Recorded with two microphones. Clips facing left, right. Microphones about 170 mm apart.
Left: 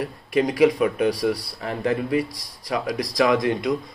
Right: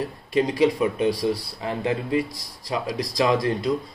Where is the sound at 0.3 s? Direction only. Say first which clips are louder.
Left 2 dB; 25° right (ahead or behind).